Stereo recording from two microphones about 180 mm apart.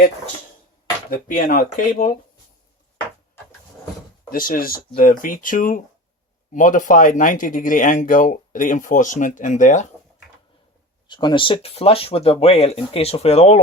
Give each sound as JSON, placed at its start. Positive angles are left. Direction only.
{"t": 1.3, "sound": "speech", "side_deg": 50}
{"t": 4.3, "sound": "speech", "side_deg": 50}
{"t": 11.1, "sound": "speech", "side_deg": 25}